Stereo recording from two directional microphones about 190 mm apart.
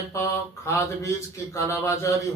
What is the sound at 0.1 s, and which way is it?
Speech, 15° left (ahead or behind).